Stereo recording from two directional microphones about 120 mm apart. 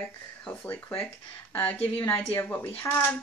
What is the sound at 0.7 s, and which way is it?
Speech, 20° left (ahead or behind).